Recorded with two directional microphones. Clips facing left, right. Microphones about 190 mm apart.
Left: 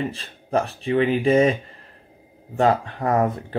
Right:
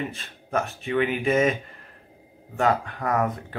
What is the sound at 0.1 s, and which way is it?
Speech, 35° left (ahead or behind).